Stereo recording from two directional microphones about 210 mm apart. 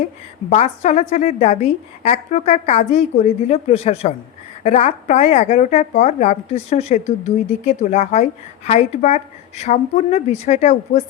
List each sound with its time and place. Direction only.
0.5 s speech: 35° left (ahead or behind)